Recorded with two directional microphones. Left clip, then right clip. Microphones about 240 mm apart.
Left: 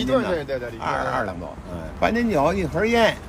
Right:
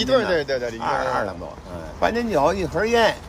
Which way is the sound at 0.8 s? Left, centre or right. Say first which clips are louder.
Even; centre.